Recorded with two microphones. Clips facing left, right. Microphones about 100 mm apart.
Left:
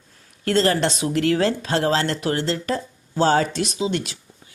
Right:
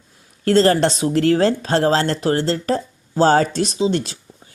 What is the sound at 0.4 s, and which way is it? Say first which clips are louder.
Speech: right 5 dB; 35° right (ahead or behind).